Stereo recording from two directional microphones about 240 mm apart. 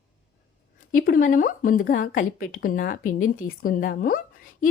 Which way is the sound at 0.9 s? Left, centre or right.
Left.